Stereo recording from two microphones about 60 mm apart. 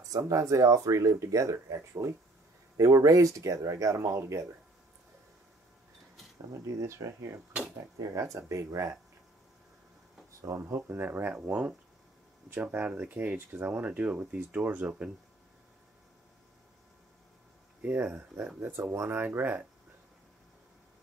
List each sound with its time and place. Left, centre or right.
0.2 s speech: right
4.0 s speech: right
6.6 s speech: right
10.6 s speech: right
11.1 s speech: right
13.0 s speech: right
17.8 s speech: right